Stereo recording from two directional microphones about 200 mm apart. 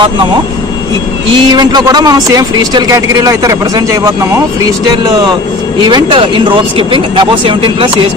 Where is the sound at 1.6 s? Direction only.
20° right (ahead or behind).